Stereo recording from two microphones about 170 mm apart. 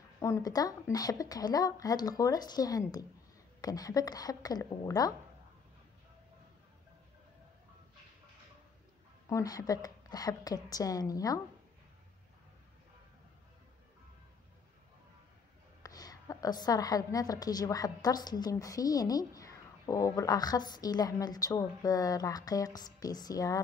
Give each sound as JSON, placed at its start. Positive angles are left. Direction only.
{"t": 0.2, "sound": "a woman's voice", "side_deg": 20}
{"t": 9.3, "sound": "a woman's voice", "side_deg": 20}
{"t": 15.8, "sound": "a woman's voice", "side_deg": 20}